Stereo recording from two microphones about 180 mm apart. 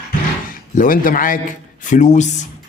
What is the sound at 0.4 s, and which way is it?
A man's voice, 50° left (ahead or behind).